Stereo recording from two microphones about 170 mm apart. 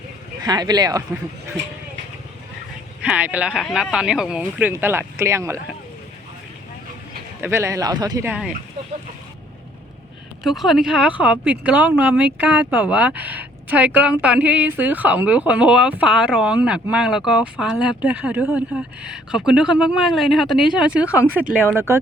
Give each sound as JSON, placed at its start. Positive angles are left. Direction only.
{"t": 0.4, "sound": "speech", "side_deg": -25}
{"t": 3.0, "sound": "speech", "side_deg": -10}
{"t": 7.4, "sound": "speech", "side_deg": -15}
{"t": 8.3, "sound": "speech", "side_deg": -5}
{"t": 10.4, "sound": "speech", "side_deg": 0}